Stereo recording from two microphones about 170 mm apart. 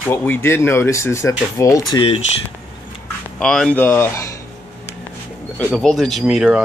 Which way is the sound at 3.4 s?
5° left (ahead or behind).